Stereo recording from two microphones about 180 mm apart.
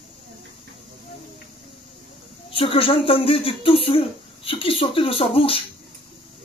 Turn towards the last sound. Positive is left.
turn(degrees=30)  # may be behind; listen again after turning